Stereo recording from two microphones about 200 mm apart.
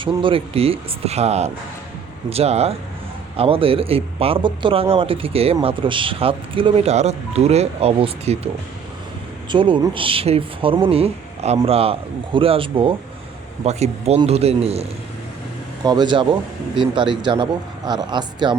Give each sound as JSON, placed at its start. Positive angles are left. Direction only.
{"t": 0.0, "sound": "speech", "side_deg": -25}
{"t": 9.5, "sound": "speech", "side_deg": -25}
{"t": 15.8, "sound": "speech", "side_deg": -20}